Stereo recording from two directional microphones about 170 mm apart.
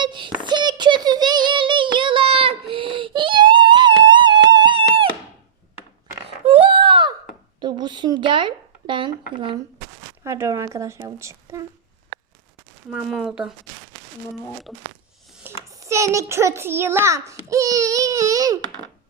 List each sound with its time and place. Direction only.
0.0 s child singing: 25° right (ahead or behind)
6.4 s a sound: 30° right (ahead or behind)
10.2 s a child's voice: 15° right (ahead or behind)
12.9 s speech: 5° right (ahead or behind)
14.7 s speech: centre (ahead or behind)
15.7 s a child's voice: 20° right (ahead or behind)
17.5 s baby cry: 20° right (ahead or behind)